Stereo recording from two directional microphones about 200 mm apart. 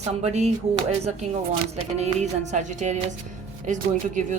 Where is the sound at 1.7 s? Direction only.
35° right (ahead or behind).